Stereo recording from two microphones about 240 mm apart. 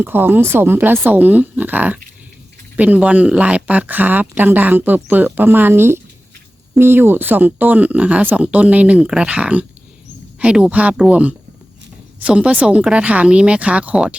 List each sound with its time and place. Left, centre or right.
0.0 s speech: centre